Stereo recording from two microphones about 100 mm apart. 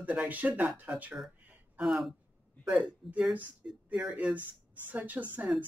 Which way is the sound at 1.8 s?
Centre (ahead or behind).